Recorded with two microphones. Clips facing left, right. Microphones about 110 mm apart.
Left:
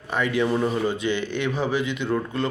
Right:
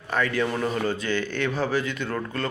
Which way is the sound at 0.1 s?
15° left (ahead or behind).